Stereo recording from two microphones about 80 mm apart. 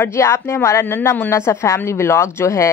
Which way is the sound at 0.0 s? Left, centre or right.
Left.